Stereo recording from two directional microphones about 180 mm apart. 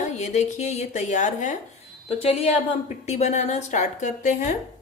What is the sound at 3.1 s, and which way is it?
Speech, 40° left (ahead or behind).